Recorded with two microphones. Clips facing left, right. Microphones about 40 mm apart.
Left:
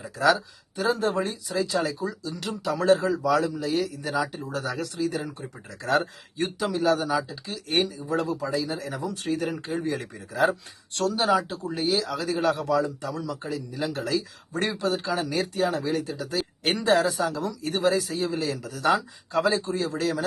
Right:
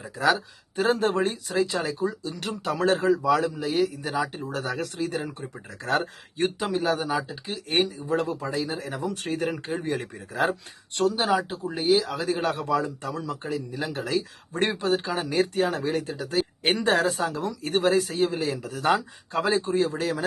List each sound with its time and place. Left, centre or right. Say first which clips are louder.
0.2 s a man's voice: left 1 dB; right
6.6 s a man's voice: left 6 dB; right
11.0 s speech: even; centre
12.1 s a man's voice: left 1 dB; right
16.1 s speech: right 2 dB; right
16.7 s a man's voice: left 2 dB; right